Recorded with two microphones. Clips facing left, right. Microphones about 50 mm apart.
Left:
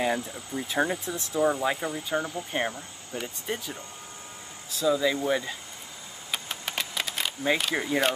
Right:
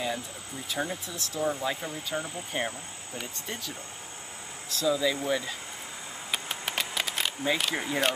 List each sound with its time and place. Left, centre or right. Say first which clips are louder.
0.0 s speech: left 5 dB; left; by 5.5 s centre
6.3 s engine: even; centre
7.5 s speech: left 2 dB; centre